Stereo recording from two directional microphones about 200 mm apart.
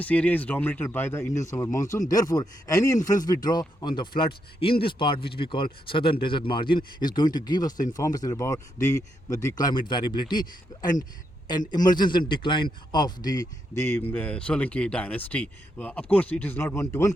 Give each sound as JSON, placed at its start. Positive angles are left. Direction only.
{"t": 0.0, "sound": "speech", "side_deg": 5}
{"t": 14.0, "sound": "speech", "side_deg": 5}